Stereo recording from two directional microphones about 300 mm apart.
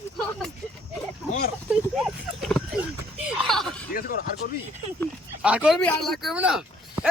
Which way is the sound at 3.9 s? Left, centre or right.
Left.